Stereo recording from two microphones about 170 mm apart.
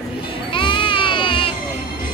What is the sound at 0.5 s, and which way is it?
Baby cry, 30° left (ahead or behind).